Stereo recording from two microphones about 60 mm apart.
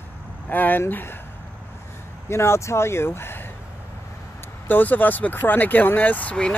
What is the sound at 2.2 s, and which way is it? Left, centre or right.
Speech, left.